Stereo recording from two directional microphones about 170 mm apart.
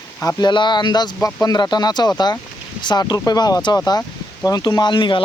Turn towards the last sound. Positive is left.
turn(degrees=30)  # may be behind; listen again after turning